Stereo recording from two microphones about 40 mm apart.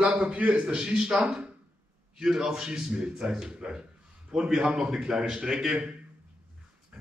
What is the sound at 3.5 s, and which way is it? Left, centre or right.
A man's voice, right.